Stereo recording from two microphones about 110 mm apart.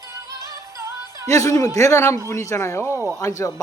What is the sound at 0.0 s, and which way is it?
Music, 30° right (ahead or behind).